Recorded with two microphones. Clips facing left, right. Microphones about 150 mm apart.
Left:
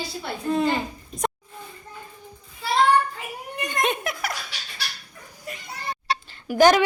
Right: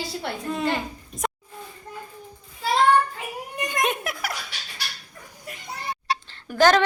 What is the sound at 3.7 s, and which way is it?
Giggle, 5° right (ahead or behind).